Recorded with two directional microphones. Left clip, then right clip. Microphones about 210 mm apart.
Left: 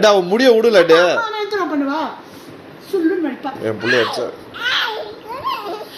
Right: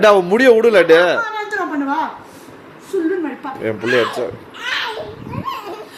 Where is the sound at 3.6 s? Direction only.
20° right (ahead or behind).